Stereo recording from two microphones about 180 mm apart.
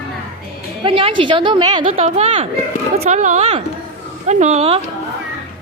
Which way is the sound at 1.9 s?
35° right (ahead or behind).